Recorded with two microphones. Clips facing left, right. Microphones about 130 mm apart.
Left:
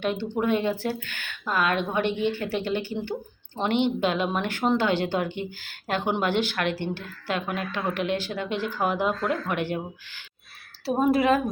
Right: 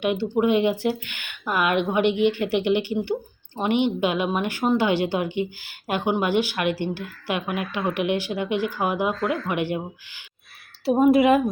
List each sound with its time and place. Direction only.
0.0 s a woman's voice: 10° right (ahead or behind)